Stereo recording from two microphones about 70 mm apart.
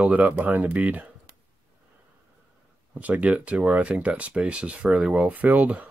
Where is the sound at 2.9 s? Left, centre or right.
Right.